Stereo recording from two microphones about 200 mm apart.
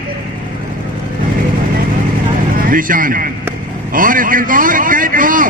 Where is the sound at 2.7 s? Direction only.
45° right (ahead or behind).